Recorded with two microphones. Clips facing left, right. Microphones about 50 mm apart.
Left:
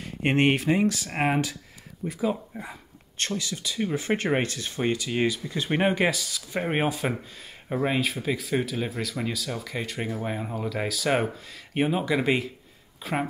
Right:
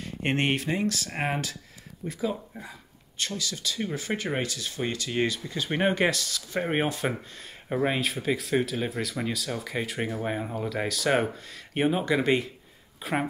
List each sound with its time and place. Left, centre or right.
0.0 s speech: centre
4.0 s speech: left
5.1 s speech: centre